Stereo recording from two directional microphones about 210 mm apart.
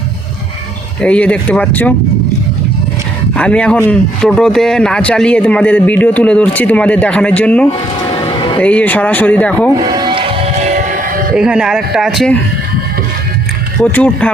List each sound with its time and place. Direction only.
1.0 s speech: 5° left (ahead or behind)
3.3 s speech: 5° left (ahead or behind)
9.9 s music: 20° right (ahead or behind); by 11.3 s 40° right (ahead or behind)
11.3 s speech: 5° right (ahead or behind)
13.9 s speech: 5° left (ahead or behind)